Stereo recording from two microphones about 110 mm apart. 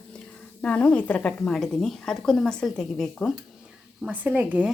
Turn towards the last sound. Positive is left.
turn(degrees=-10)  # may be behind; listen again after turning